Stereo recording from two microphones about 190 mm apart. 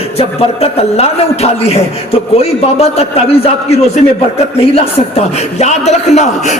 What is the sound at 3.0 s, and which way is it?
A man's voice, 30° left (ahead or behind).